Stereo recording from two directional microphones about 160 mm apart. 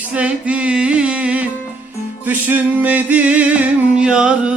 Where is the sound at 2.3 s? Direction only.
10° right (ahead or behind).